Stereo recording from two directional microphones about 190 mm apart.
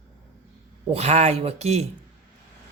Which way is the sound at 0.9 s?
35° right (ahead or behind).